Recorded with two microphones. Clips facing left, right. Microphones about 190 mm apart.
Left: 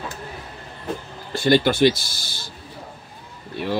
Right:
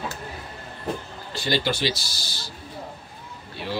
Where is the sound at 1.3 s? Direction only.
55° left (ahead or behind).